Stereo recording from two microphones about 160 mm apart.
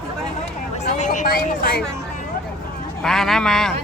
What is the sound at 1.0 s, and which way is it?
Speech, 55° left (ahead or behind).